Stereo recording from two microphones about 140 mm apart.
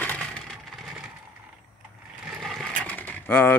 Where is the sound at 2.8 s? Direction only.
10° left (ahead or behind).